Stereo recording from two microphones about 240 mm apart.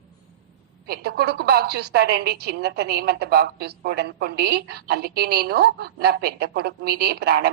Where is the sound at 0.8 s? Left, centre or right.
Right.